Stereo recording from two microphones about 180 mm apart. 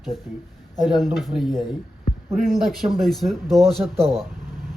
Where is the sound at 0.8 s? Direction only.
Centre (ahead or behind).